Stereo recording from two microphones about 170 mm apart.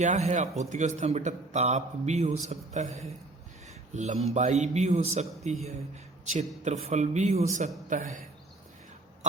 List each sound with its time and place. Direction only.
0.0 s a man's voice: 45° right (ahead or behind)
6.7 s a man's voice: 40° right (ahead or behind)